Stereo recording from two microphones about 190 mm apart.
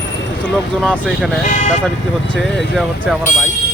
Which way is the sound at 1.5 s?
40° left (ahead or behind).